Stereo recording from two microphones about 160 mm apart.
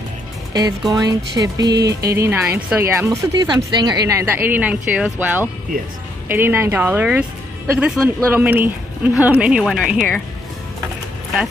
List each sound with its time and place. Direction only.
0.5 s speech: 25° right (ahead or behind)
1.4 s music: 25° right (ahead or behind)
2.0 s a woman's voice: 15° right (ahead or behind); by 10.2 s 5° left (ahead or behind)